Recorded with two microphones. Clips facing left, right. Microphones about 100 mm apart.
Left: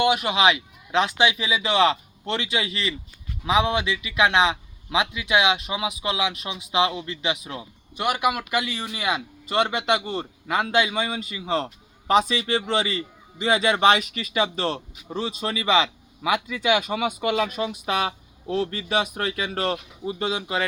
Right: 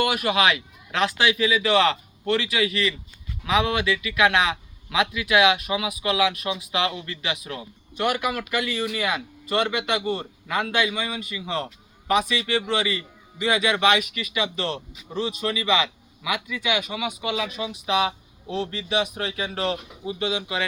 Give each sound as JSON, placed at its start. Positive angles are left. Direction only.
{"t": 0.0, "sound": "a man's voice", "side_deg": 20}
{"t": 20.1, "sound": "a man's voice", "side_deg": 40}